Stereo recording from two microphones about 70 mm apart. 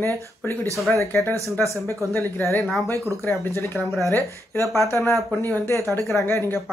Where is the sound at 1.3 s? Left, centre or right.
Right.